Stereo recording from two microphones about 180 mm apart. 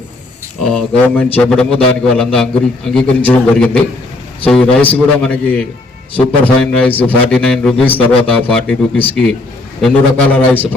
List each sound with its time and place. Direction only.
0.6 s a man's voice: 5° left (ahead or behind)